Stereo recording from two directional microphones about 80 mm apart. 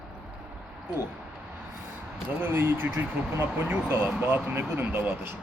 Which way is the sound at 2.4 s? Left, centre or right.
Right.